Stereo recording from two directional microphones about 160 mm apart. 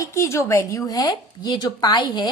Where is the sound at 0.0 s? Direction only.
20° left (ahead or behind).